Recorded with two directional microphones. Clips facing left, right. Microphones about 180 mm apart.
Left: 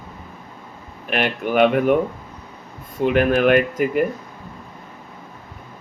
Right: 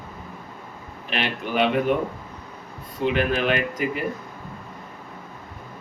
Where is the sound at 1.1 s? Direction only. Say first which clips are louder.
Left 5 dB; 50° left (ahead or behind).